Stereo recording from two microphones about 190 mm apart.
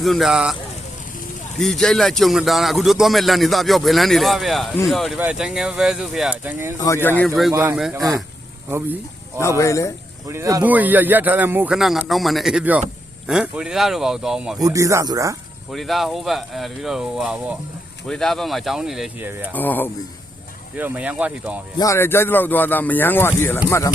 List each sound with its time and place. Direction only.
0.0 s a man's voice: centre (ahead or behind)
1.5 s a man's voice: centre (ahead or behind)
6.7 s speech: 15° left (ahead or behind)
7.5 s speech: 15° right (ahead or behind)
7.8 s a man's voice: centre (ahead or behind)
9.4 s speech: 15° left (ahead or behind)
10.2 s a man's voice: 15° right (ahead or behind)
14.6 s speech: 15° right (ahead or behind)
15.7 s a man's voice: centre (ahead or behind)
19.5 s speech: 10° left (ahead or behind)
20.7 s speech: 10° right (ahead or behind)
21.8 s speech: 15° left (ahead or behind)